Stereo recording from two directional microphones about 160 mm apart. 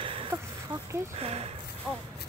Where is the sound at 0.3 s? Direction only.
15° right (ahead or behind).